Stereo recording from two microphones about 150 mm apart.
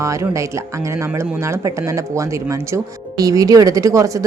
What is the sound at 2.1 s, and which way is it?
Speech, 20° right (ahead or behind).